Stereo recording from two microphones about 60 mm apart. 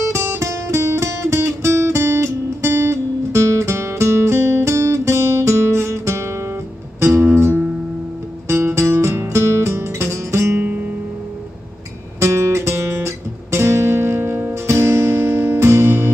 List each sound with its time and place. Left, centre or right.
0.0 s music: right
7.3 s music: right
10.6 s music: right
12.2 s music: right
14.5 s music: right